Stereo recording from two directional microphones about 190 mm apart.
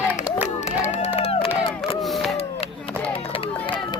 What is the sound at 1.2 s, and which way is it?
Crowd, 30° left (ahead or behind).